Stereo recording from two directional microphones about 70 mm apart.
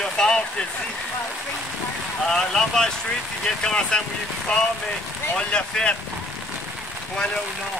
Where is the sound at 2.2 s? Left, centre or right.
Centre.